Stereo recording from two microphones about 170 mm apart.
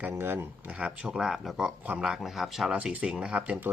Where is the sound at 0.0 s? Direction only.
15° right (ahead or behind).